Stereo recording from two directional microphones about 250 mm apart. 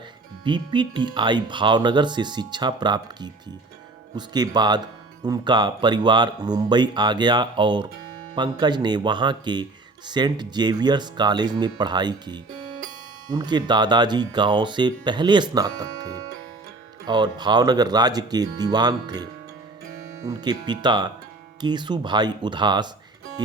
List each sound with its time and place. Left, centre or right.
0.4 s speech: centre